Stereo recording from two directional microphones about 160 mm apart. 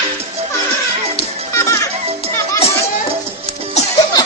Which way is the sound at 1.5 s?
20° left (ahead or behind).